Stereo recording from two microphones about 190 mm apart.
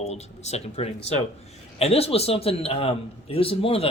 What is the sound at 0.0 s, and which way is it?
Speech, 35° left (ahead or behind).